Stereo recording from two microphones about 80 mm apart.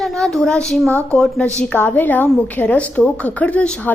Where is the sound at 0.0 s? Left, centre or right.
Centre.